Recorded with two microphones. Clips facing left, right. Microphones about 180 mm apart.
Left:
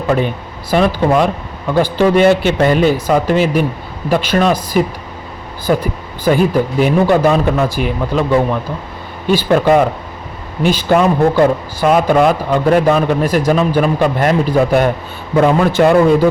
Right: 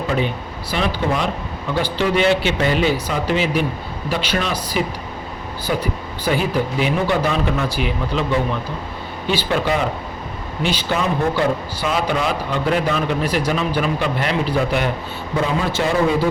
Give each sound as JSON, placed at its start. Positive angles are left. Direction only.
{"t": 0.7, "sound": "a man's voice", "side_deg": 50}
{"t": 9.3, "sound": "a man's voice", "side_deg": 50}
{"t": 15.4, "sound": "a man's voice", "side_deg": 60}